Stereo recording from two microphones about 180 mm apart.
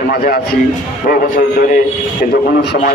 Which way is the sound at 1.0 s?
55° left (ahead or behind).